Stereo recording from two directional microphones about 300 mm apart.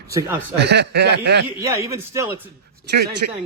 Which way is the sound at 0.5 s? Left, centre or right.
Right.